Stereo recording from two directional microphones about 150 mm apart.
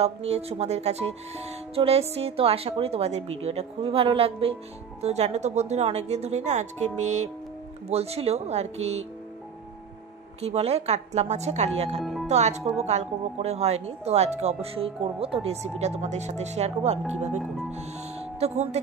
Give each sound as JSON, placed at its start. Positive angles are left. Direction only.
{"t": 0.0, "sound": "speech", "side_deg": -45}
{"t": 10.4, "sound": "speech", "side_deg": -45}
{"t": 12.0, "sound": "music", "side_deg": 0}
{"t": 12.3, "sound": "speech", "side_deg": -50}